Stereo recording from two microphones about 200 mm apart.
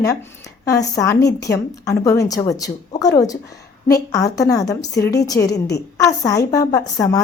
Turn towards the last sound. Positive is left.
turn(degrees=15)  # may be behind; listen again after turning